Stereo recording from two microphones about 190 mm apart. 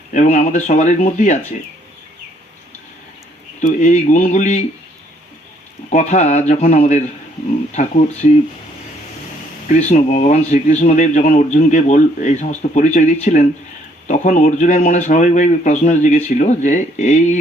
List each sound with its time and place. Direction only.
0.1 s speech: 40° left (ahead or behind)
3.6 s speech: 40° left (ahead or behind)
5.9 s speech: 40° left (ahead or behind)
9.7 s speech: 40° left (ahead or behind)